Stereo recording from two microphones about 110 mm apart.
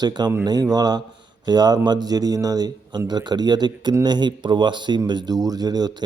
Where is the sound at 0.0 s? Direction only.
40° right (ahead or behind).